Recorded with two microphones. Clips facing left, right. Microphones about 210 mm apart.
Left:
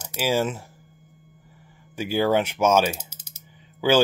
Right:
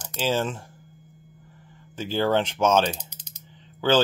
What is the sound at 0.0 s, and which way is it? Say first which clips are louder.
Speech: left 2 dB; 10° left (ahead or behind).